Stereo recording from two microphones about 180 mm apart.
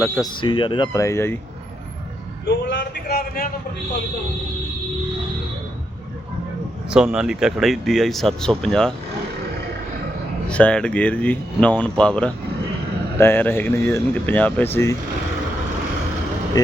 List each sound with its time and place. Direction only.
0.4 s speech: 25° left (ahead or behind)
2.6 s a sound: 70° left (ahead or behind)
6.9 s speech: 5° right (ahead or behind)
10.5 s speech: 5° left (ahead or behind)
16.6 s speech: 20° left (ahead or behind)